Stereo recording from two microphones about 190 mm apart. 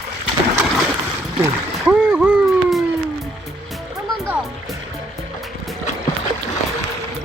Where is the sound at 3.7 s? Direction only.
Centre (ahead or behind).